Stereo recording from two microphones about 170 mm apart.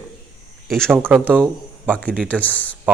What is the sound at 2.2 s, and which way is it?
Speech, 10° left (ahead or behind).